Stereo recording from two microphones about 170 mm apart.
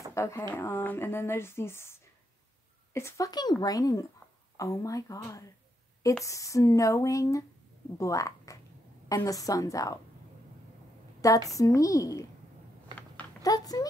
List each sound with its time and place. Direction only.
0.1 s a woman's voice: 15° left (ahead or behind)
11.1 s a woman's voice: 20° left (ahead or behind)
12.9 s a sound: 10° left (ahead or behind)
13.4 s speech: 20° left (ahead or behind)